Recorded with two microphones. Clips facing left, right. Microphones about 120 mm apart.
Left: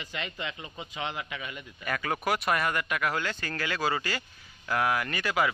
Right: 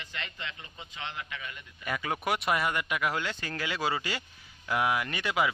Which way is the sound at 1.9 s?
15° right (ahead or behind).